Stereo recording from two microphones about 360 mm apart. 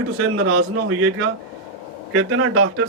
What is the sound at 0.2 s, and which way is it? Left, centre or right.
Speech, right.